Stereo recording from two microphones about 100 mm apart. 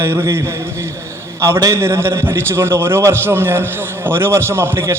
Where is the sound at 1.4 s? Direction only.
30° right (ahead or behind).